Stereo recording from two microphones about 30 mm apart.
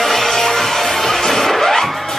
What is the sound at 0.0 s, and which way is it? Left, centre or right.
Music, centre.